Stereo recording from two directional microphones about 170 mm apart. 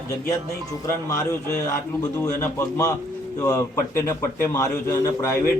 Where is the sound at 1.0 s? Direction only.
15° left (ahead or behind).